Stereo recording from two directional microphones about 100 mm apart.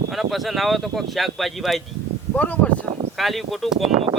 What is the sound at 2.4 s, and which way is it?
Speech, 15° left (ahead or behind).